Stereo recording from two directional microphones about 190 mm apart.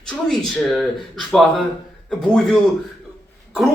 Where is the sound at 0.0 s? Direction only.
Centre (ahead or behind).